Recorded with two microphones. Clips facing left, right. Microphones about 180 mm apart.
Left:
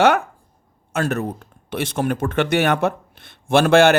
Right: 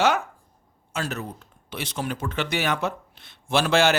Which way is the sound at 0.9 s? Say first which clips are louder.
Left 8 dB; 50° left (ahead or behind).